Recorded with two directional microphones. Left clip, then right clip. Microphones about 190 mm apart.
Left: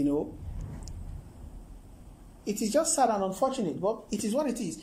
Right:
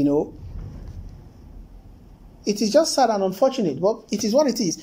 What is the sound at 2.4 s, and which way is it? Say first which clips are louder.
Speech: right 9 dB; 15° right (ahead or behind).